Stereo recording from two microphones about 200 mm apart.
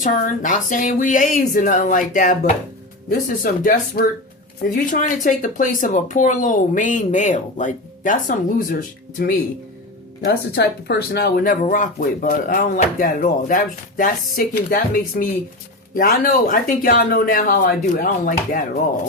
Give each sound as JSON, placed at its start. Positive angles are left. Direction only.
{"t": 0.0, "sound": "speech", "side_deg": 40}
{"t": 11.6, "sound": "speech", "side_deg": 40}